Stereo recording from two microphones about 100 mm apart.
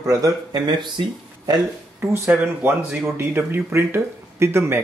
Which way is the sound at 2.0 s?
20° right (ahead or behind).